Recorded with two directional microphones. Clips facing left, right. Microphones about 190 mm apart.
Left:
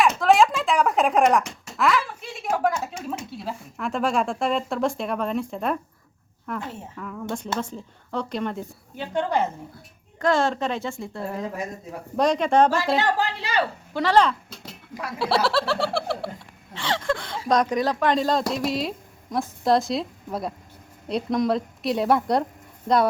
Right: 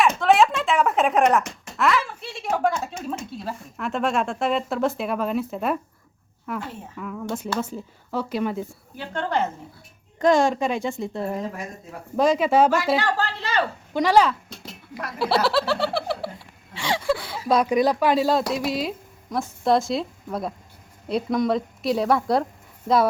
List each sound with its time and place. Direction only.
0.0 s a woman's voice: centre (ahead or behind)
9.0 s speech: 15° left (ahead or behind)
10.2 s a woman's voice: 15° right (ahead or behind)
12.1 s a woman's voice: centre (ahead or behind)
13.0 s speech: 15° left (ahead or behind)
13.9 s speech: 10° right (ahead or behind)
16.7 s a woman's voice: 10° right (ahead or behind)